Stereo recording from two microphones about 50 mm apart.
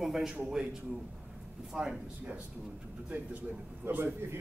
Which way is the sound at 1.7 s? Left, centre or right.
Centre.